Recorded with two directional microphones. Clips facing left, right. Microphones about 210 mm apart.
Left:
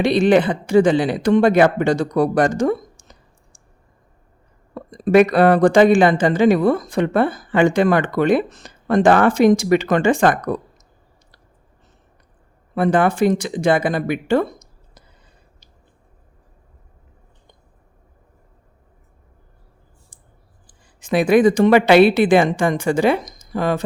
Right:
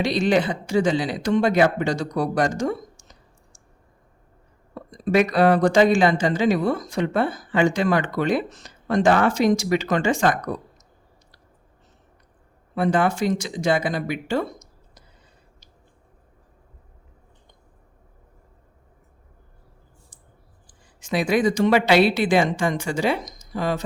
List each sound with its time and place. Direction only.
0.0 s speech: 55° left (ahead or behind)
4.7 s speech: 55° left (ahead or behind)
12.7 s speech: 55° left (ahead or behind)
21.0 s speech: 55° left (ahead or behind)